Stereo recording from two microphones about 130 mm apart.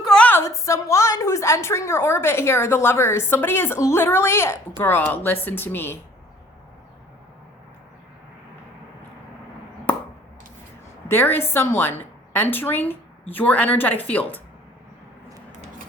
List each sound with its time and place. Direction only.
0.0 s a sound: 5° left (ahead or behind)
0.4 s a woman's voice: 25° left (ahead or behind)
11.1 s a woman's voice: 15° left (ahead or behind)